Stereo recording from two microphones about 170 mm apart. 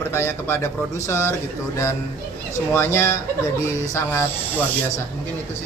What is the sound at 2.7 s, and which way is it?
Speech, 15° left (ahead or behind).